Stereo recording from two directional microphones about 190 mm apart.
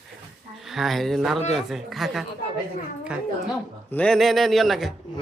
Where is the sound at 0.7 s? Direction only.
Centre (ahead or behind).